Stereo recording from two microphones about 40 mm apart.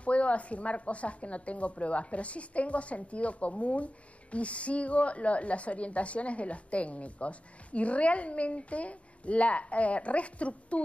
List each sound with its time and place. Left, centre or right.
0.0 s speech: left